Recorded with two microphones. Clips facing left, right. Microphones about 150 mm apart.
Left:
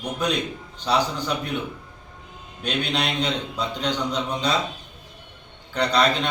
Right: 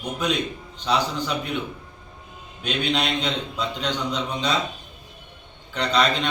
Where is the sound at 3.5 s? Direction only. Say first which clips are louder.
Left 1 dB; 10° left (ahead or behind).